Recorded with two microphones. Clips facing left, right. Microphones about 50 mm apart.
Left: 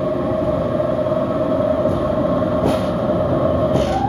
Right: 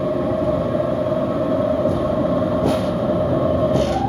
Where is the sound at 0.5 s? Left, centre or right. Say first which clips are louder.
Left 1 dB; left.